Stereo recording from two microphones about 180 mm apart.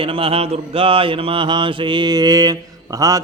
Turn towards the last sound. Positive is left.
turn(degrees=-20)  # may be behind; listen again after turning